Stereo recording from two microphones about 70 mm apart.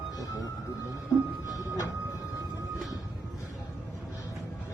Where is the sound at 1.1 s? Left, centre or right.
Centre.